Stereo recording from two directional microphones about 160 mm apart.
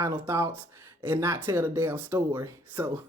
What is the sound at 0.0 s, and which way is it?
Speech, 15° right (ahead or behind).